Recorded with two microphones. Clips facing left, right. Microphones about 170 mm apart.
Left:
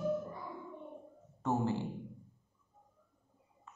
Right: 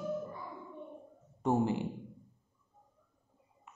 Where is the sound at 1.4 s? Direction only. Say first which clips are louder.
Right 3 dB; 15° right (ahead or behind).